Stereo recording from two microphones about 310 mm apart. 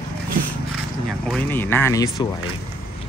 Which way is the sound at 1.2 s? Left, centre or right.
Centre.